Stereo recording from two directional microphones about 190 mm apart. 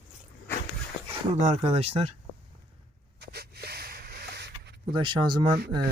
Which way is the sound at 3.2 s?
60° right (ahead or behind).